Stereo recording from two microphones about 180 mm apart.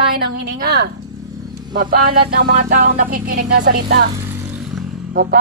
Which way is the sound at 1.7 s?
55° right (ahead or behind).